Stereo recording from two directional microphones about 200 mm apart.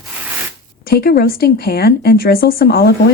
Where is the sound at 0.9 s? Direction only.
50° left (ahead or behind).